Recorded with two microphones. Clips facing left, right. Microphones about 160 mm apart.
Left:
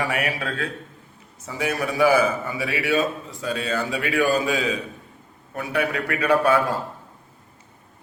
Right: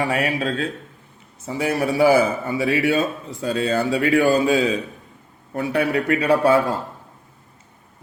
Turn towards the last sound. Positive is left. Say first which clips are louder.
# right 3 dB
turn(degrees=-30)  # may be behind; listen again after turning